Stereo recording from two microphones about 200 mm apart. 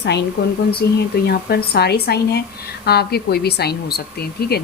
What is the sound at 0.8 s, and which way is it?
A woman's voice, 55° left (ahead or behind).